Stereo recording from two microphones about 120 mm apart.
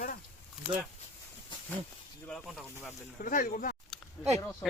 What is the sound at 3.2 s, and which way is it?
Speech, 90° left.